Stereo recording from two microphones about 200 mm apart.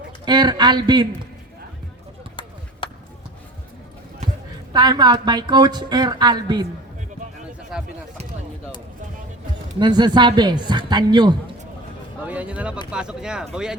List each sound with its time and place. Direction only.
0.3 s speech: 20° right (ahead or behind)
4.7 s speech: 20° right (ahead or behind)
7.7 s speech: centre (ahead or behind)
9.8 s speech: 20° right (ahead or behind)
12.2 s speech: 10° right (ahead or behind)